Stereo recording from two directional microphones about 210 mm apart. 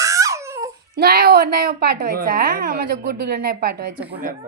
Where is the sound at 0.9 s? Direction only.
50° right (ahead or behind).